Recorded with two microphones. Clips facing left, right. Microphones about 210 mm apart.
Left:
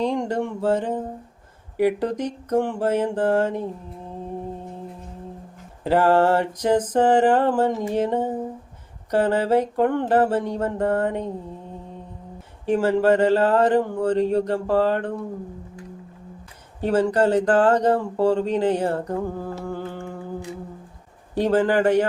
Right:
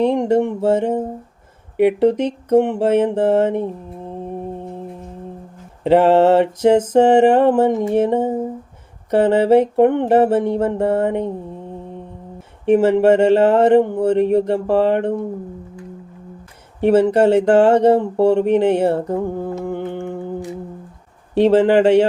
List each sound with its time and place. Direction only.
0.1 s mantra: 25° right (ahead or behind)
5.8 s mantra: 25° right (ahead or behind)
12.6 s mantra: 25° right (ahead or behind)
16.9 s mantra: 25° right (ahead or behind)
21.3 s mantra: 25° right (ahead or behind)